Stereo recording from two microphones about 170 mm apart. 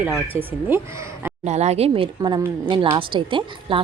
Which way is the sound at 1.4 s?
40° right (ahead or behind).